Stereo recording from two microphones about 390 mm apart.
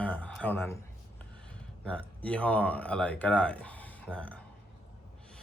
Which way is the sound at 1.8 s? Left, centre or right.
Centre.